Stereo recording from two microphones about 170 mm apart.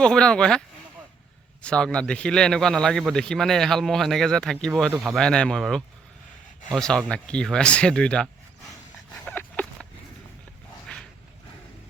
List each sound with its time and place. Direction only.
0.0 s a man's voice: 5° left (ahead or behind)
1.6 s a man's voice: 5° left (ahead or behind)
4.9 s speech: 15° right (ahead or behind)
5.1 s a man's voice: 5° left (ahead or behind)
9.2 s a sound: 10° left (ahead or behind)
10.9 s a sound: 5° left (ahead or behind)